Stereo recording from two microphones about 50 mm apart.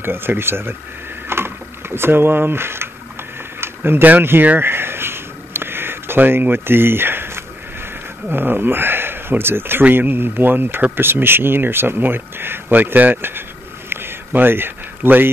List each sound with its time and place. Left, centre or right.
0.0 s speech: right
1.3 s mechanisms: right
3.6 s speech: right
4.6 s a sound: right
8.3 s speech: right